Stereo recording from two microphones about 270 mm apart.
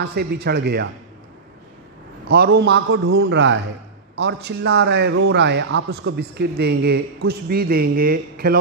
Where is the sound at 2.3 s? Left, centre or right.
Right.